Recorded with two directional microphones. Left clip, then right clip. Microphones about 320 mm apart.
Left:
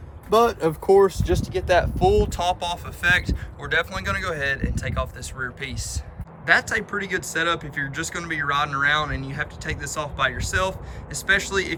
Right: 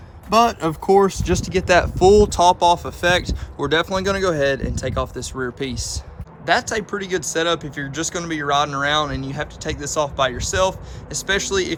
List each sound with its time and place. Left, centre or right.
0.3 s speech: right; by 11.7 s centre